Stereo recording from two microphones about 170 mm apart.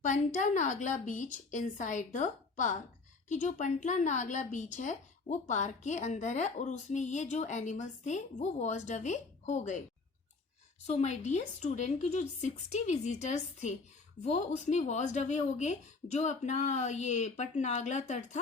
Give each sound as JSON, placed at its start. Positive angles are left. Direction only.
{"t": 0.0, "sound": "a woman's voice", "side_deg": 45}
{"t": 10.8, "sound": "a woman's voice", "side_deg": 40}